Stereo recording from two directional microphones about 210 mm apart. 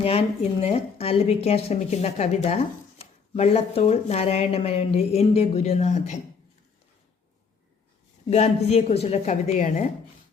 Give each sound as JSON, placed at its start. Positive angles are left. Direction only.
{"t": 0.0, "sound": "speech", "side_deg": 30}
{"t": 8.3, "sound": "a woman's voice", "side_deg": 30}